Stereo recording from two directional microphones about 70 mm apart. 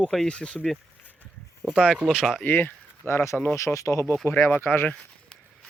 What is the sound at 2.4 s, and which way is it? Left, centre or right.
Speech, left.